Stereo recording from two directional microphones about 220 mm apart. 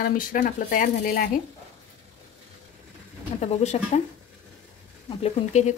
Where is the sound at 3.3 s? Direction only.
30° left (ahead or behind).